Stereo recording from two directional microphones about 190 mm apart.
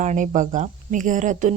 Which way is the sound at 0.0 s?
40° right (ahead or behind).